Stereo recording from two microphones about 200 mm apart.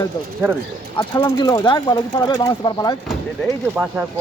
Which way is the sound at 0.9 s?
20° left (ahead or behind).